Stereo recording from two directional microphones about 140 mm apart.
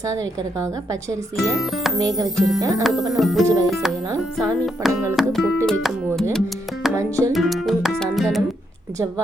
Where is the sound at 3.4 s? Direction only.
25° right (ahead or behind).